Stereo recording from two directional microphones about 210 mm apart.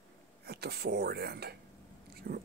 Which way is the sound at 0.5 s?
50° right (ahead or behind).